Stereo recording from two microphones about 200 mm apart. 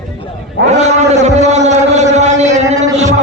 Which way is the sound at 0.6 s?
35° right (ahead or behind).